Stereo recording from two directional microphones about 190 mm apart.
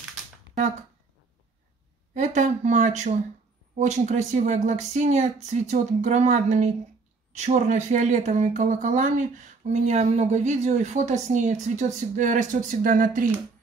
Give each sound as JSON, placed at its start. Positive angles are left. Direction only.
{"t": 2.1, "sound": "speech", "side_deg": -40}